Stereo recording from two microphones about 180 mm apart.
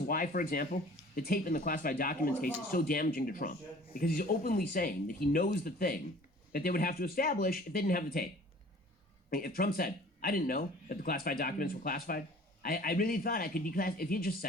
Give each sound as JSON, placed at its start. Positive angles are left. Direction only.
{"t": 0.1, "sound": "speech", "side_deg": 50}
{"t": 9.3, "sound": "speech", "side_deg": 55}